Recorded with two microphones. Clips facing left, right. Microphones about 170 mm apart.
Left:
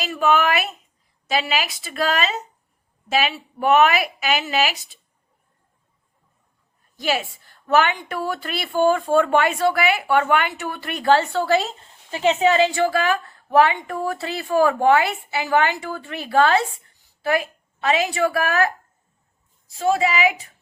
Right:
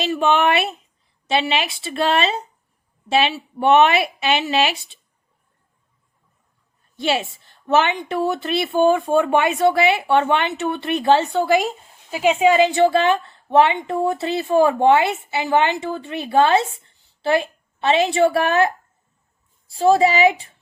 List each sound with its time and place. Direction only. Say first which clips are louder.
0.0 s a woman's voice: right 2 dB; 25° right (ahead or behind)
6.9 s a woman's voice: right 2 dB; 25° right (ahead or behind)